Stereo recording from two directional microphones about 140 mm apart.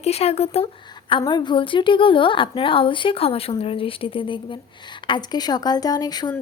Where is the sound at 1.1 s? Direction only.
35° left (ahead or behind).